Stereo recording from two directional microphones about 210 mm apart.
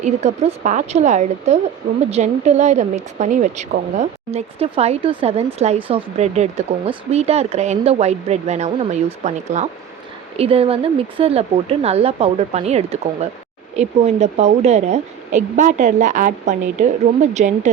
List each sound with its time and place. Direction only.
0.0 s speech: 35° right (ahead or behind)